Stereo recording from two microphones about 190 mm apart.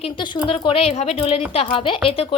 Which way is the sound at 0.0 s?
25° left (ahead or behind).